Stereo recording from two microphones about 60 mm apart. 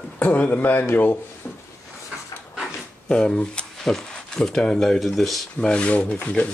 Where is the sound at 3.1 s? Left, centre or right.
Centre.